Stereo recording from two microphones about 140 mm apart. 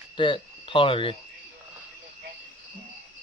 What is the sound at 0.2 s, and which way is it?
Speech, 35° left (ahead or behind).